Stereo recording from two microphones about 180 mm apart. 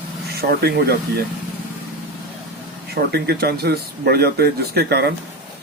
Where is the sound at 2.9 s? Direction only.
60° right (ahead or behind).